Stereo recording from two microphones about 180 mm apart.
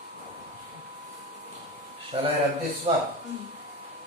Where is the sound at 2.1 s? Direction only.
30° right (ahead or behind).